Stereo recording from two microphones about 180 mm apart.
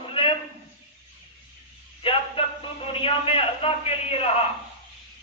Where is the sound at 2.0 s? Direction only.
30° left (ahead or behind).